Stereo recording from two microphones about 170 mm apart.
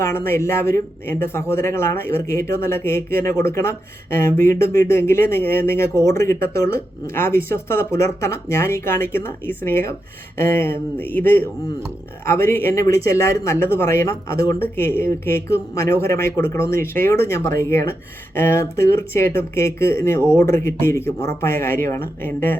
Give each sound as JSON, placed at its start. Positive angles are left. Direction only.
{"t": 0.0, "sound": "speech", "side_deg": 15}